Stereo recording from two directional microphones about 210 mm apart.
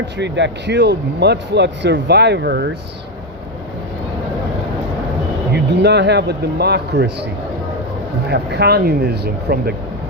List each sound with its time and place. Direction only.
0.2 s speech: 55° right (ahead or behind)
5.7 s speech: 55° right (ahead or behind)
8.3 s speech: 50° right (ahead or behind)